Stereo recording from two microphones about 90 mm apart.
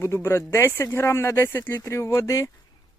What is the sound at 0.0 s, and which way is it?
Speech, 30° left (ahead or behind).